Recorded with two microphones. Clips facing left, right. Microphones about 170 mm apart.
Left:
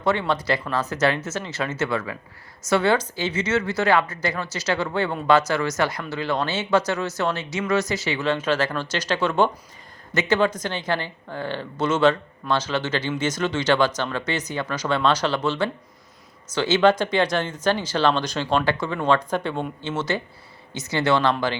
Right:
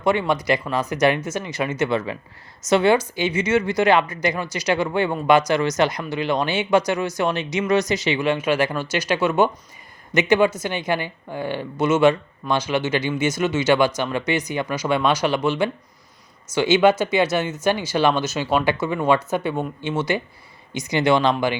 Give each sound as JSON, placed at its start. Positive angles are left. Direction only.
{"t": 0.0, "sound": "speech", "side_deg": -15}